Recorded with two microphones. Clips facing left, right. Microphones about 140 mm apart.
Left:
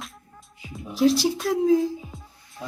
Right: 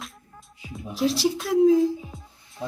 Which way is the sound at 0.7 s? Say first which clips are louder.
Left 5 dB; centre (ahead or behind).